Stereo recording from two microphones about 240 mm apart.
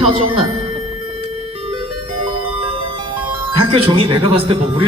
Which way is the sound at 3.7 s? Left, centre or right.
Right.